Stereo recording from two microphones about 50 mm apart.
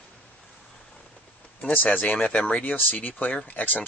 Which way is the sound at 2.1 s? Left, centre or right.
Left.